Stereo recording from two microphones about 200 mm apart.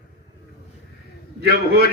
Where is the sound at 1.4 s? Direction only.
50° right (ahead or behind).